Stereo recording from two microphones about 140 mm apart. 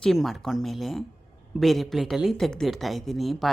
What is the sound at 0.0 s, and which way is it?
A woman's voice, centre (ahead or behind).